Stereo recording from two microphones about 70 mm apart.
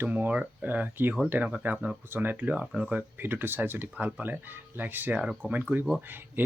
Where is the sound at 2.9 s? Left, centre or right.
Right.